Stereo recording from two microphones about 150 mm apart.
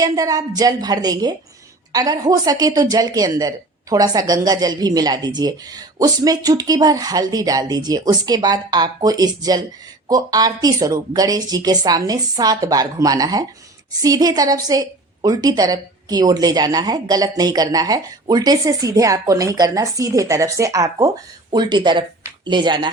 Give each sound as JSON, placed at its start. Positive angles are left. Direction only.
{"t": 0.0, "sound": "speech", "side_deg": -25}